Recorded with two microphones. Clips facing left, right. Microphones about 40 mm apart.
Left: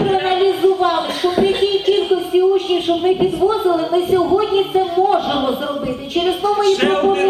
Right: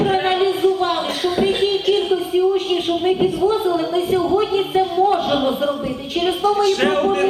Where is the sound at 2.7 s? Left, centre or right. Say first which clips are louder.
Left 2 dB; left.